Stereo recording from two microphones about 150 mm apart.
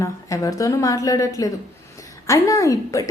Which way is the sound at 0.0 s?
20° left (ahead or behind).